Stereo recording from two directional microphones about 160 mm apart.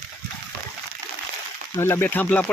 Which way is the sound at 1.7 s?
15° left (ahead or behind).